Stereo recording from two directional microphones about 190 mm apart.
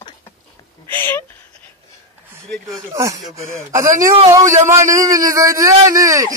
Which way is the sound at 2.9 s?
15° right (ahead or behind).